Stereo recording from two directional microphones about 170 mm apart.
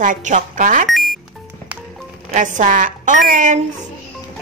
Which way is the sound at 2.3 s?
50° right (ahead or behind).